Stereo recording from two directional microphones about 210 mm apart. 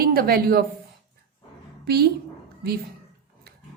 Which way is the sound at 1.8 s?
50° right (ahead or behind).